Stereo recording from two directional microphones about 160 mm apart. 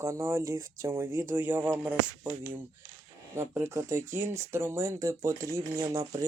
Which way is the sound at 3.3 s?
15° right (ahead or behind).